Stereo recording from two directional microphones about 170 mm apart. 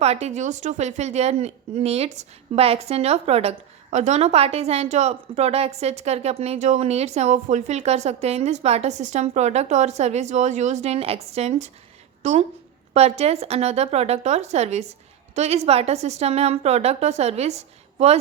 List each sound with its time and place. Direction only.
0.0 s a woman's voice: 40° right (ahead or behind)